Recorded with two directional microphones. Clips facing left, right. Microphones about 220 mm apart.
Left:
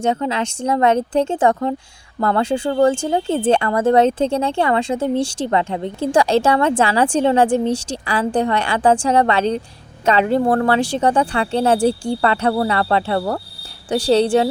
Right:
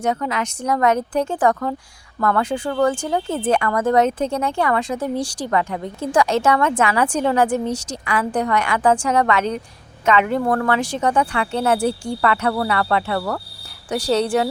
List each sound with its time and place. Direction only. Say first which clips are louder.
0.0 s speech: left 3 dB; 25° left (ahead or behind)